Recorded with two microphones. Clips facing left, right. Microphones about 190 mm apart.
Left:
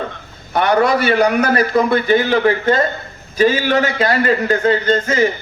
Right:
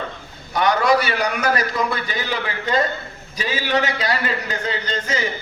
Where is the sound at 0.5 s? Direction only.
60° left (ahead or behind).